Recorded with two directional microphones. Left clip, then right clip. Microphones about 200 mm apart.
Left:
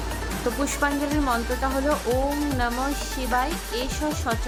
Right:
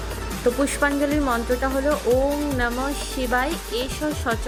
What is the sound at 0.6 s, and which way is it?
Speech, 15° right (ahead or behind).